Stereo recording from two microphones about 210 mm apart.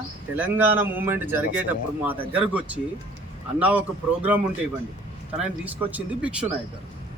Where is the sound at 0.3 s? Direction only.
10° right (ahead or behind).